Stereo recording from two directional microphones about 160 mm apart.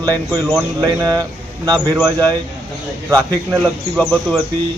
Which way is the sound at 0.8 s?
25° right (ahead or behind).